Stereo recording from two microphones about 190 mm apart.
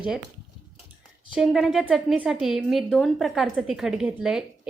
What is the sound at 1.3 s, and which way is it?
A woman's voice, 5° right (ahead or behind).